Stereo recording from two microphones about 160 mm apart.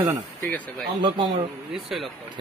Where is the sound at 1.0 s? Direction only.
30° right (ahead or behind).